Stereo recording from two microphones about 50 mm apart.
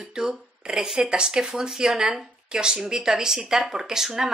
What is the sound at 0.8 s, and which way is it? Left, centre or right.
Speech, centre.